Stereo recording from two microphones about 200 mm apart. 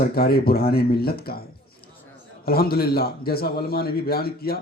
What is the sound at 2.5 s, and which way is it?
Speech, 50° left (ahead or behind).